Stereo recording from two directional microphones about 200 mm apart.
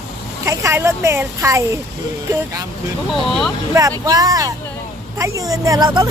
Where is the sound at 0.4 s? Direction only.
15° right (ahead or behind).